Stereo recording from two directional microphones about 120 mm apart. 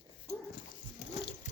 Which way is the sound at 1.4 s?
80° left.